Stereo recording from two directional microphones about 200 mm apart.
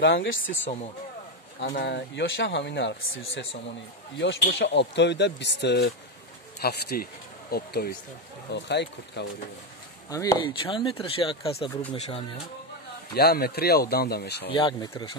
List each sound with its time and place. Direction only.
0.0 s speech: 70° left (ahead or behind)
1.8 s speech: 60° left (ahead or behind)
10.0 s speech: 15° left (ahead or behind)
13.1 s speech: 50° left (ahead or behind)
14.5 s speech: 25° left (ahead or behind)